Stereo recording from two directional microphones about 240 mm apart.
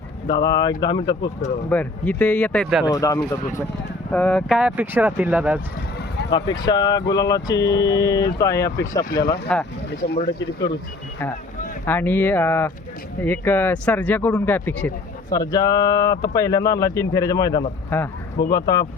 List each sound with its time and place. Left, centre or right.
0.3 s speech: centre
1.7 s speech: centre
2.9 s speech: centre
6.3 s speech: centre
9.0 s speech: left
10.2 s speech: centre
11.9 s speech: centre